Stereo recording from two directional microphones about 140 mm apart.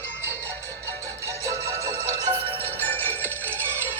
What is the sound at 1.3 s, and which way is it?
Music, 20° right (ahead or behind).